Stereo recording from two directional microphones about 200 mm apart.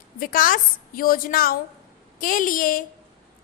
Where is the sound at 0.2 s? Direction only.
45° left (ahead or behind).